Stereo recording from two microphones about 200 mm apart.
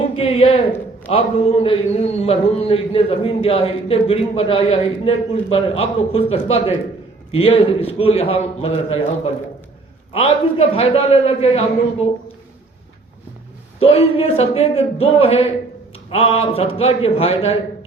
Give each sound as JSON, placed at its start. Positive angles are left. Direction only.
{"t": 0.0, "sound": "a woman's voice", "side_deg": 30}
{"t": 13.7, "sound": "a man's voice", "side_deg": 30}